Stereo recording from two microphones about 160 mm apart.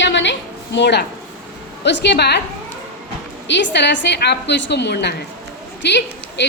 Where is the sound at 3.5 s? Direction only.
90° left.